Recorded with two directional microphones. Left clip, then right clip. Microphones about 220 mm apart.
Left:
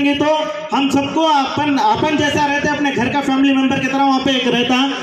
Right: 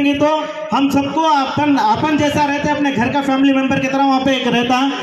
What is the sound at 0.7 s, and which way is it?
A man's voice, 25° left (ahead or behind).